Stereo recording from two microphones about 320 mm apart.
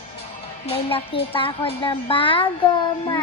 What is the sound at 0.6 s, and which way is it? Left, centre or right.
Speech, centre.